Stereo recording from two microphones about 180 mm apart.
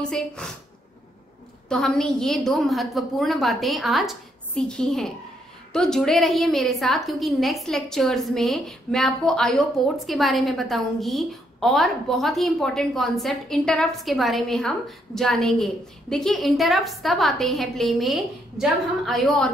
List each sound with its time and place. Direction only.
0.0 s a woman's voice: 5° left (ahead or behind)
1.7 s a woman's voice: 5° left (ahead or behind)